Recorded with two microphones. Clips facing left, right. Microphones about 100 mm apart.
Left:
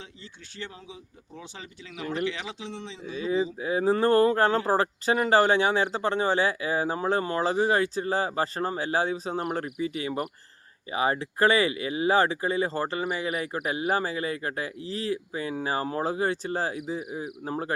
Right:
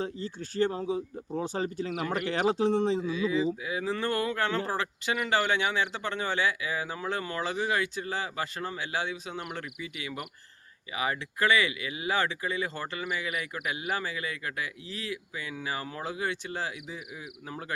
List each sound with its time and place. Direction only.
0.0 s speech: 40° right (ahead or behind)
3.1 s speech: 35° left (ahead or behind)